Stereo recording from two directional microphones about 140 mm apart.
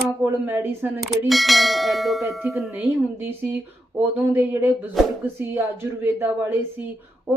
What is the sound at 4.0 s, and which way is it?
Speech, 15° right (ahead or behind).